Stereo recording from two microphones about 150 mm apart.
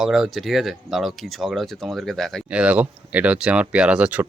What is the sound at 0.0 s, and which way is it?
Speech, centre (ahead or behind).